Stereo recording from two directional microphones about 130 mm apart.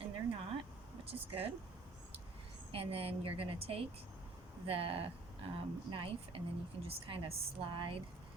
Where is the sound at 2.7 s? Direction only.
45° right (ahead or behind).